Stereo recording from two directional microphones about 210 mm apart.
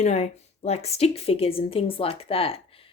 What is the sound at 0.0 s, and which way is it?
Speech, 30° left (ahead or behind).